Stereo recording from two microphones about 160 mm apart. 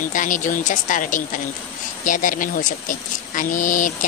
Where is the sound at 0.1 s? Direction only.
55° left (ahead or behind).